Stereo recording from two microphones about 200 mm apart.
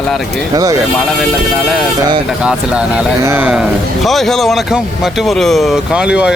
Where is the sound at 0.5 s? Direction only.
15° right (ahead or behind).